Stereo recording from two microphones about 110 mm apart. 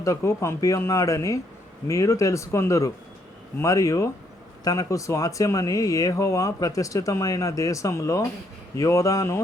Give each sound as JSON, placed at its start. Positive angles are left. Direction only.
{"t": 0.0, "sound": "speech", "side_deg": 25}